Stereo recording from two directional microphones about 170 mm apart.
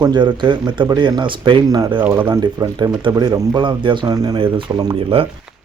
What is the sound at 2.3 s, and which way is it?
Speech, 25° right (ahead or behind).